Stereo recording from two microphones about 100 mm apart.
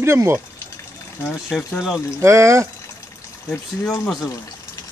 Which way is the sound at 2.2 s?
30° right (ahead or behind).